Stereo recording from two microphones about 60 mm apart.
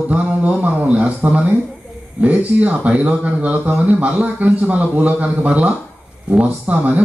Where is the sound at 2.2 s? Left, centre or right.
Right.